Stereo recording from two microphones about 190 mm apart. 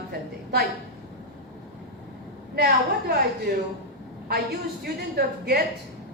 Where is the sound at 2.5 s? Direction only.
55° right (ahead or behind).